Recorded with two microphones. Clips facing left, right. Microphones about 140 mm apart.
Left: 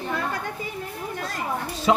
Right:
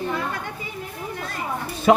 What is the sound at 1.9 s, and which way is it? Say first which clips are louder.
Speech: right 4 dB; 55° right (ahead or behind).